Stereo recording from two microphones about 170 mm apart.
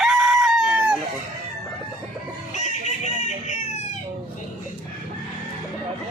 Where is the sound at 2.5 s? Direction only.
40° left (ahead or behind).